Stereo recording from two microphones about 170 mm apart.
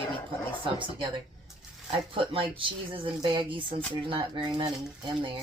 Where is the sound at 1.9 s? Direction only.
30° right (ahead or behind).